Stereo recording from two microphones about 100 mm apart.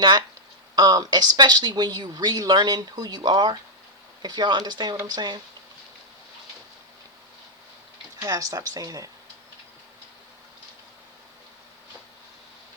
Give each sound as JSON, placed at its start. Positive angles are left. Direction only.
{"t": 0.0, "sound": "speech", "side_deg": -45}
{"t": 8.2, "sound": "speech", "side_deg": -35}